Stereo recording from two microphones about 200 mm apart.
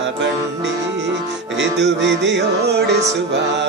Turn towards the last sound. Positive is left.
turn(degrees=-55)  # may be behind; listen again after turning